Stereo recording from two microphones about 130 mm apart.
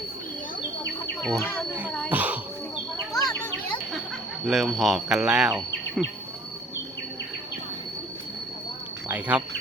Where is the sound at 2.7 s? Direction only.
30° left (ahead or behind).